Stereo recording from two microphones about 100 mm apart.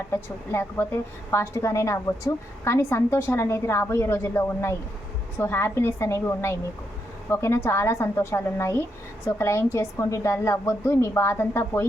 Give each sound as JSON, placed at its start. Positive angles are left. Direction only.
{"t": 0.1, "sound": "a woman's voice", "side_deg": 25}